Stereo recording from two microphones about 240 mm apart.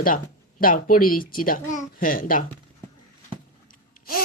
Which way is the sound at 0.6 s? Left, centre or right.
Left.